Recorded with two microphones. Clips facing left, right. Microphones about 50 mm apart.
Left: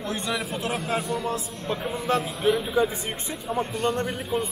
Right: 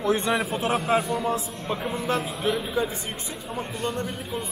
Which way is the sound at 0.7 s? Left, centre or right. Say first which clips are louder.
Right 4 dB; centre.